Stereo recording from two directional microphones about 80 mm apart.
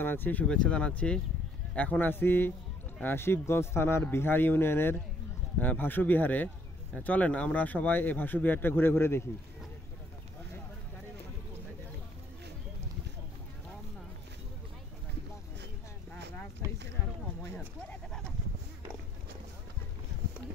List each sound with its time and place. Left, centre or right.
0.0 s speech: left
0.5 s speech: centre; by 9.2 s left
16.6 s a sound: right